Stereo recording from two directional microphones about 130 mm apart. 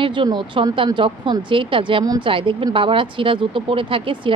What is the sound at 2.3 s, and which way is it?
Speech, 45° right (ahead or behind).